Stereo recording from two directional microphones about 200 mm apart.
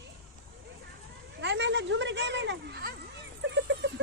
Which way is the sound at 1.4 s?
65° right (ahead or behind).